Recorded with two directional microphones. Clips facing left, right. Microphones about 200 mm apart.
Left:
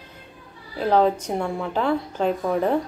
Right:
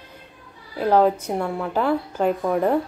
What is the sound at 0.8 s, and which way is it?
Speech, 10° right (ahead or behind).